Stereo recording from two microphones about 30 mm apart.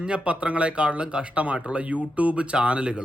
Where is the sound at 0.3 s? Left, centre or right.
Right.